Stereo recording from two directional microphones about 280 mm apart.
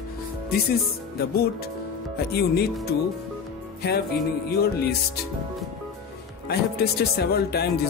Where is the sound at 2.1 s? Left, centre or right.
Left.